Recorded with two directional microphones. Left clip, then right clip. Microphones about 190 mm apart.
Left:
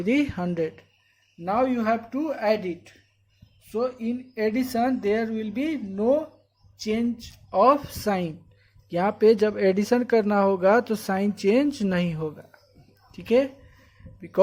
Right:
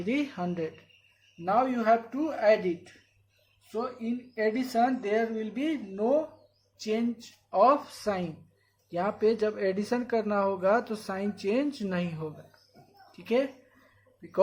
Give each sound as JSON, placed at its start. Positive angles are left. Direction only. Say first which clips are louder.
{"t": 0.0, "sound": "speech", "louder": "left 6 dB", "side_deg": 35}